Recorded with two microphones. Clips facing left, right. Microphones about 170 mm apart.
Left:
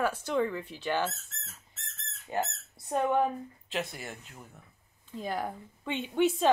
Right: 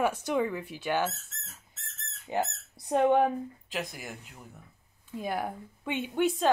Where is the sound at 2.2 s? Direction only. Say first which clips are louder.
Right 2 dB; 20° right (ahead or behind).